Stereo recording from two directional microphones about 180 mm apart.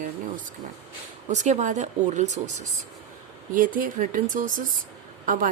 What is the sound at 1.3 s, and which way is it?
Speech, 40° right (ahead or behind).